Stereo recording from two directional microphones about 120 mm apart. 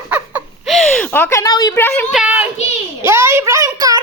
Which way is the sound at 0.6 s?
Centre (ahead or behind).